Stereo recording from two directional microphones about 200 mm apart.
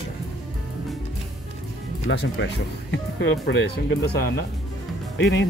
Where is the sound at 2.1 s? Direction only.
60° left (ahead or behind).